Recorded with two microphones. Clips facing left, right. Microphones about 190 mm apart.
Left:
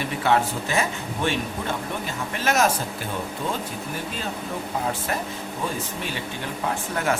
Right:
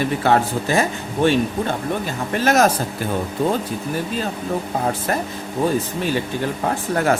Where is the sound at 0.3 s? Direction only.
40° right (ahead or behind).